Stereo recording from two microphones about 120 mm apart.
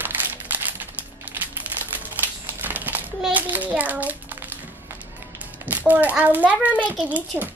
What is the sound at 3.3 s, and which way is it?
Child singing, 15° right (ahead or behind).